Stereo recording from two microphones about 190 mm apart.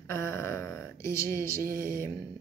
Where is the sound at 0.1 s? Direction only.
15° left (ahead or behind).